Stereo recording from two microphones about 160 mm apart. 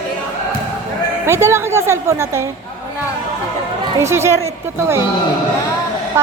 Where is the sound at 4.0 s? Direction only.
15° right (ahead or behind).